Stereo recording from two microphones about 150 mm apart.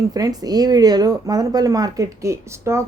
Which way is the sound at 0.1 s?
25° right (ahead or behind).